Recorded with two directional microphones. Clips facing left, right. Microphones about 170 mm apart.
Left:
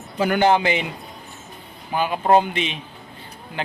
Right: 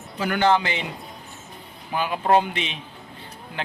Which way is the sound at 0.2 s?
15° left (ahead or behind).